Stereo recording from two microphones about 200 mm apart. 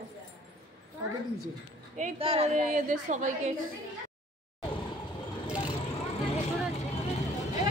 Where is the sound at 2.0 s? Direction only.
35° right (ahead or behind).